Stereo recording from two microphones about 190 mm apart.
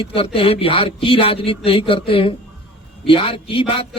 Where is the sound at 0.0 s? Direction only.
30° left (ahead or behind).